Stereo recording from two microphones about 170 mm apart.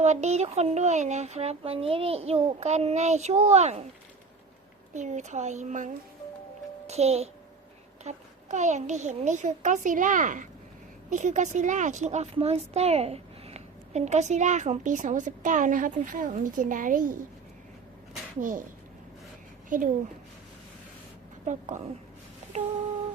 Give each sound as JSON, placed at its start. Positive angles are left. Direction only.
{"t": 0.0, "sound": "speech", "side_deg": -40}
{"t": 4.9, "sound": "a woman's voice", "side_deg": -45}
{"t": 18.3, "sound": "a woman's voice", "side_deg": -50}
{"t": 21.4, "sound": "a woman's voice", "side_deg": -45}